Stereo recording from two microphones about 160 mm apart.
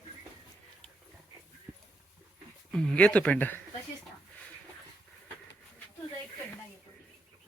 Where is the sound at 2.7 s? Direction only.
5° left (ahead or behind).